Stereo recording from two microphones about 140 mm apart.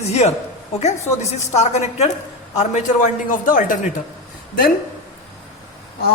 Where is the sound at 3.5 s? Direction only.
70° left (ahead or behind).